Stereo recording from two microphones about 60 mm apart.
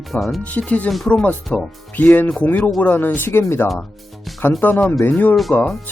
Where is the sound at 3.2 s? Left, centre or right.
Left.